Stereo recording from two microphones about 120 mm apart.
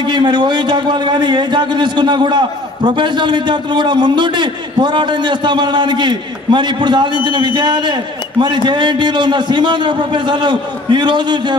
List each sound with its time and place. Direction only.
0.0 s a man's voice: 40° right (ahead or behind)